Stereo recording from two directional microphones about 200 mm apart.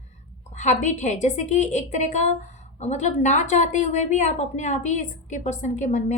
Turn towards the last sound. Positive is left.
turn(degrees=35)  # may be behind; listen again after turning